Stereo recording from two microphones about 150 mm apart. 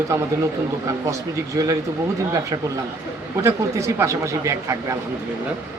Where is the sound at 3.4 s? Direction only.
20° right (ahead or behind).